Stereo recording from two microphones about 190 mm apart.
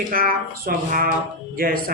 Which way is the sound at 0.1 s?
50° right (ahead or behind).